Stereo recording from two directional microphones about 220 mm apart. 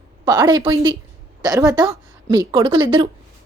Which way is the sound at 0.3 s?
20° right (ahead or behind).